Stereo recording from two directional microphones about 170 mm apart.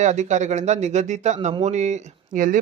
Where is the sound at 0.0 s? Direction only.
45° right (ahead or behind).